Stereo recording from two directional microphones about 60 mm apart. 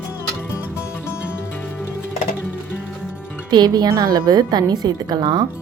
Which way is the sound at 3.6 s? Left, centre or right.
Right.